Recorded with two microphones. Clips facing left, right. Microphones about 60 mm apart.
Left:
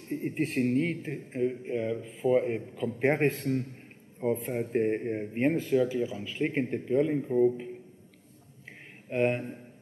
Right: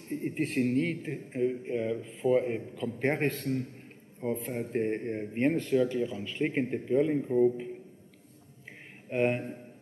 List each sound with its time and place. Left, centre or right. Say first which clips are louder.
0.1 s a man's voice: left 1 dB; centre
9.1 s speech: left 1 dB; centre